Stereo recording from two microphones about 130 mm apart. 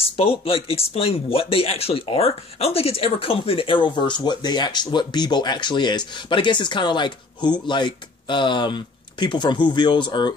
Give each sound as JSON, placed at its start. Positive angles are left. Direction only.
{"t": 0.0, "sound": "speech", "side_deg": 45}